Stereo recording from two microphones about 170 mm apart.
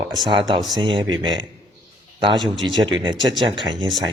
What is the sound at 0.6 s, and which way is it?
Speech, centre (ahead or behind).